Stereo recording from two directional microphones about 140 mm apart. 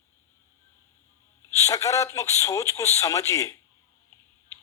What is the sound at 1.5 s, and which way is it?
Speech, 20° left (ahead or behind).